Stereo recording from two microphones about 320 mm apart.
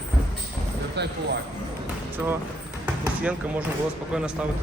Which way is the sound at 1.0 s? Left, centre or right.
Right.